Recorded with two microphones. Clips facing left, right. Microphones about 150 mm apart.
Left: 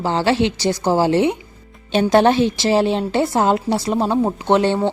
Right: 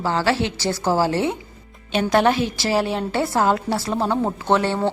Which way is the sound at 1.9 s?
30° left (ahead or behind).